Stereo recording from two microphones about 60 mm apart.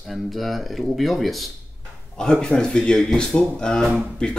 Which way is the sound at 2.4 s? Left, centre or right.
Centre.